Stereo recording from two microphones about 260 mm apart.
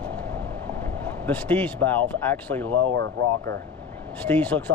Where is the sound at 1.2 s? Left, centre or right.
Centre.